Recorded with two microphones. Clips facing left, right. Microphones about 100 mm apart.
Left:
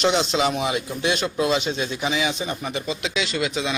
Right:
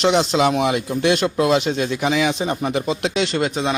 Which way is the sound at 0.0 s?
65° right (ahead or behind).